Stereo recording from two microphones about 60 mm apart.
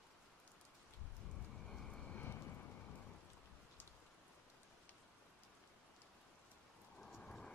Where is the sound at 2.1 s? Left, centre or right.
Left.